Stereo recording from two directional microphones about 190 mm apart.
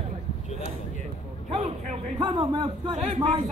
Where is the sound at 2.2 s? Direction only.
25° right (ahead or behind).